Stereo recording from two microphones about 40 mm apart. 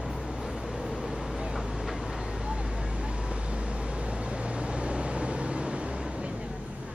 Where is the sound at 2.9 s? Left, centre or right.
Right.